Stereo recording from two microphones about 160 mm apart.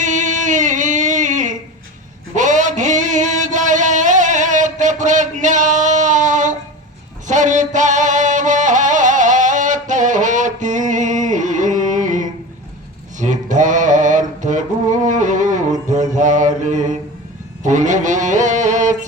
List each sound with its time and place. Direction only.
0.0 s music: 50° right (ahead or behind)
2.3 s a sound: 50° right (ahead or behind)
7.3 s music: 50° right (ahead or behind)
15.9 s mantra: 50° right (ahead or behind)
17.6 s music: 50° right (ahead or behind)